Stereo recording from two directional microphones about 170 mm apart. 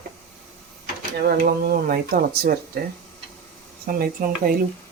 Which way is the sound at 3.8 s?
55° right (ahead or behind).